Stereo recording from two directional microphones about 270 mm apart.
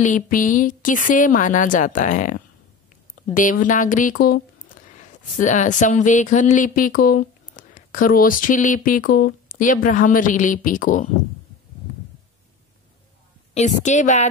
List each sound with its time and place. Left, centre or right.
0.0 s speech: left
13.6 s speech: left